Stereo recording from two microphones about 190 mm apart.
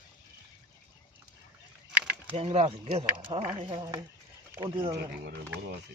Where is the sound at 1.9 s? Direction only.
10° right (ahead or behind).